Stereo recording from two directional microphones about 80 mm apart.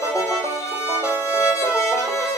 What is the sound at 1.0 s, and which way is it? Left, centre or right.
Music, left.